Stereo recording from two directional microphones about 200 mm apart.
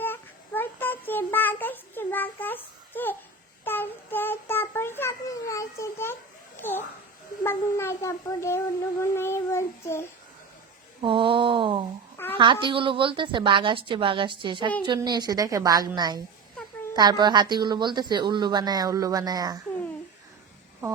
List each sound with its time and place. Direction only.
0.0 s child singing: 10° left (ahead or behind)
6.6 s a child's voice: 10° left (ahead or behind)
11.0 s speech: 25° right (ahead or behind)
12.1 s babbling: 10° left (ahead or behind)
12.4 s speech: 25° right (ahead or behind)